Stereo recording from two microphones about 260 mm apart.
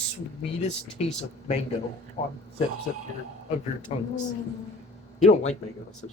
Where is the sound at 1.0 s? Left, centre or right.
Left.